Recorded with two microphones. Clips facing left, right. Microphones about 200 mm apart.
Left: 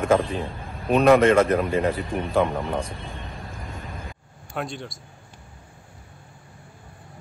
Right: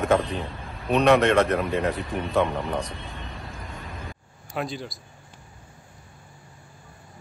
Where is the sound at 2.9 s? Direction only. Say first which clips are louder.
Left 1 dB; 50° left (ahead or behind).